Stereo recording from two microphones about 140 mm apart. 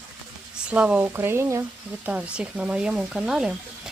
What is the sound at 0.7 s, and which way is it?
Speech, 10° right (ahead or behind).